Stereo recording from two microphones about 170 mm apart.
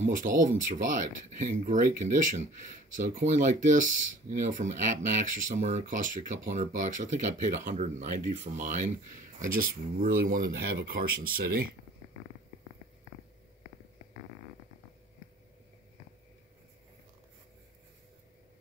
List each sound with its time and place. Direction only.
0.0 s speech: 50° right (ahead or behind)